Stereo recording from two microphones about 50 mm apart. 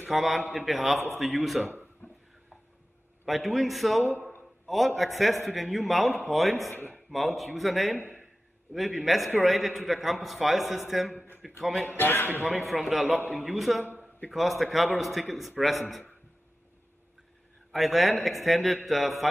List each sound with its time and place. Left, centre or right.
0.1 s a man's voice: centre
1.7 s a sound: left
3.3 s a man's voice: centre
12.0 s speech: left
12.4 s a man's voice: centre
17.6 s a man's voice: centre